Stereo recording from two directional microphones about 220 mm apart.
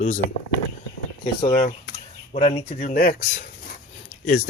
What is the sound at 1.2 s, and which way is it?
Speech, 30° left (ahead or behind).